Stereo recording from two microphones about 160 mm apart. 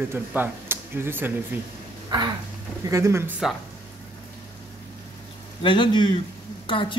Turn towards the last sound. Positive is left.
turn(degrees=30)  # may be behind; listen again after turning